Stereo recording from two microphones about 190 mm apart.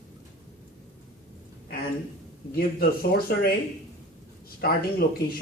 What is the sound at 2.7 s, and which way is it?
Speech, 50° left (ahead or behind).